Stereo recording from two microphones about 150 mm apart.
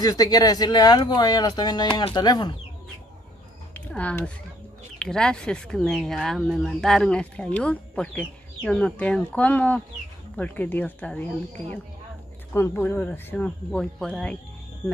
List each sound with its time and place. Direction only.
0.0 s speech: 25° left (ahead or behind)
3.7 s speech: 10° left (ahead or behind)
12.5 s speech: 15° left (ahead or behind)